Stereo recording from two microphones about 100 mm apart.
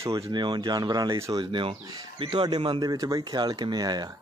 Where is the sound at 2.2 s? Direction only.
55° right (ahead or behind).